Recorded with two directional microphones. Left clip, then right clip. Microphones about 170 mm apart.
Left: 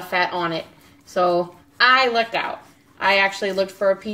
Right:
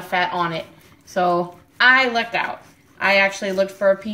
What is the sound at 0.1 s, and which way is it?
Speech, 15° left (ahead or behind).